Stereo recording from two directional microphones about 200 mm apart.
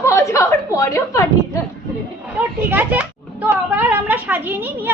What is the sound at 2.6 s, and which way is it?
A child's voice, 10° right (ahead or behind).